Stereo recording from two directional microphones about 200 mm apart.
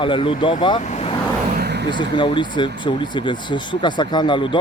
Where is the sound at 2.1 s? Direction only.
25° left (ahead or behind).